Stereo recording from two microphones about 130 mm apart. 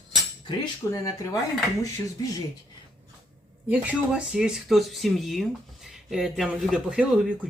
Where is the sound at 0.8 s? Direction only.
15° left (ahead or behind).